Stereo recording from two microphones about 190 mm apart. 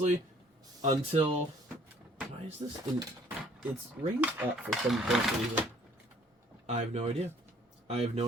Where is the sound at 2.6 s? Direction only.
25° right (ahead or behind).